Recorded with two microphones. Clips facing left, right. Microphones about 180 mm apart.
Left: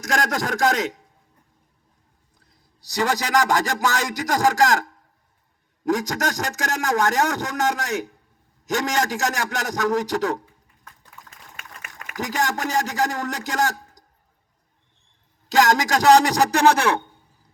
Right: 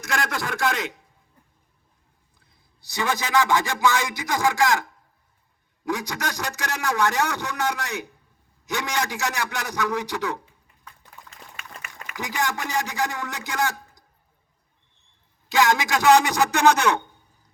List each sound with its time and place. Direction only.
0.0 s a man's voice: 45° left (ahead or behind)
2.4 s a man's voice: 40° left (ahead or behind)
11.3 s a sound: 45° left (ahead or behind)
12.0 s a man's voice: 45° left (ahead or behind)
15.4 s a man's voice: 40° left (ahead or behind)